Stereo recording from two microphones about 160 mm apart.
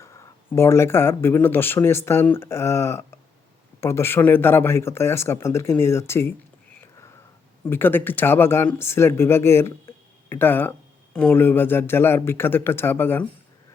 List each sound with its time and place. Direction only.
0.0 s speech: 20° left (ahead or behind)
7.6 s speech: 15° left (ahead or behind)